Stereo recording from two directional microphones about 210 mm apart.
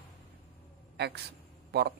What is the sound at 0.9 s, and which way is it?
A woman's voice, 50° right (ahead or behind).